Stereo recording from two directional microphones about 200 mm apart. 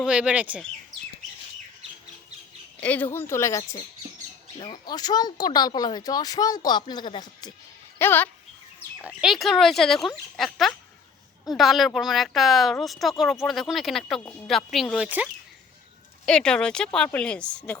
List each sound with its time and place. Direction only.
0.0 s speech: 5° right (ahead or behind)
2.8 s a woman's voice: 10° left (ahead or behind)
7.9 s a woman's voice: 10° left (ahead or behind)
9.0 s speech: centre (ahead or behind)